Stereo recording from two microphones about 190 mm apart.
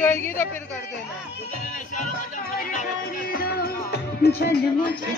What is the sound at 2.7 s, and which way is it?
Music, 45° left (ahead or behind).